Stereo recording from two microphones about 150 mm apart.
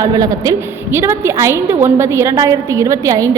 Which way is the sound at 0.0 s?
25° right (ahead or behind).